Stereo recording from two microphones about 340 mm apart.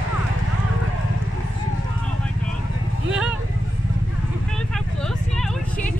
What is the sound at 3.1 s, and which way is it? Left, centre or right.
Vehicle, centre.